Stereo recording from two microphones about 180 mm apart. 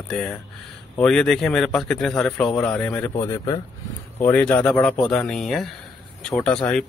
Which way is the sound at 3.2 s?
15° left (ahead or behind).